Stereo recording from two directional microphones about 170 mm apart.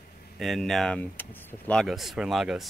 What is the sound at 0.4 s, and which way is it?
Speech, centre (ahead or behind).